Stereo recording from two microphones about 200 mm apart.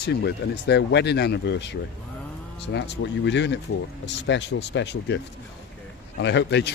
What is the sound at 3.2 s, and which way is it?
Speech, 60° left (ahead or behind).